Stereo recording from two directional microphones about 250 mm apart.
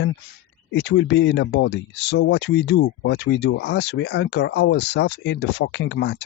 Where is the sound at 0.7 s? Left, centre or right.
Left.